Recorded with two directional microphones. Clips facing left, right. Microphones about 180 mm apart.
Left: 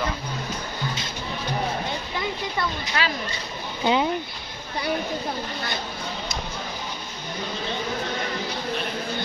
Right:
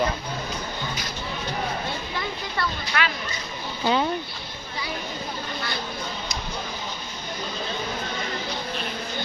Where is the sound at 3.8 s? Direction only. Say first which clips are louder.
Left 1 dB; 15° left (ahead or behind).